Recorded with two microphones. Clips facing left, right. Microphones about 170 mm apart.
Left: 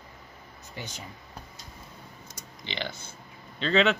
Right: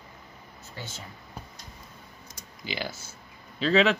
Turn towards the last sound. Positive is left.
turn(degrees=0)  # may be behind; listen again after turning